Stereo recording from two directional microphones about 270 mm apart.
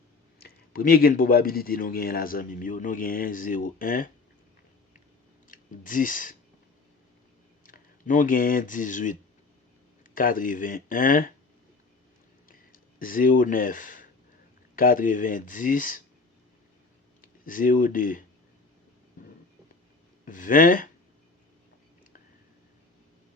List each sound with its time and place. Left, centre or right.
0.4 s speech: left
5.5 s speech: left
7.6 s speech: left
12.5 s a sound: left
14.8 s speech: left
17.2 s speech: left
20.2 s speech: left